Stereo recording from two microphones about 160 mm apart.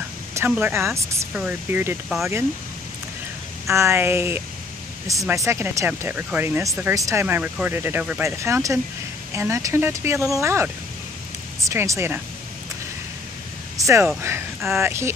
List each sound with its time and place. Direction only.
0.5 s speech: 10° right (ahead or behind)
2.0 s speech: centre (ahead or behind)
3.6 s speech: 15° right (ahead or behind)
13.7 s speech: 20° right (ahead or behind)